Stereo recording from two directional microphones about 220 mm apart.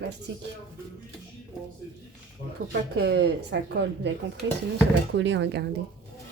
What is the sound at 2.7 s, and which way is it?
A woman's voice, 50° right (ahead or behind).